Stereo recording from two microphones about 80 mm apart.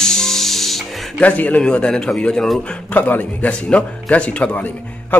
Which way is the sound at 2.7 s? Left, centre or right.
Centre.